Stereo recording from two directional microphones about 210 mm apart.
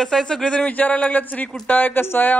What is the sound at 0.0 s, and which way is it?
A man's voice, 5° left (ahead or behind).